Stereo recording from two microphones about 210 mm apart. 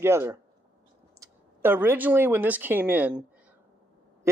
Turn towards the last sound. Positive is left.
turn(degrees=-5)  # may be behind; listen again after turning